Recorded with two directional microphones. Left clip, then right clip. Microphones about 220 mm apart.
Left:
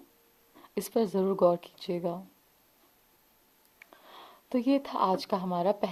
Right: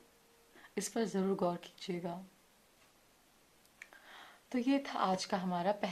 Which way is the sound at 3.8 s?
50° left (ahead or behind).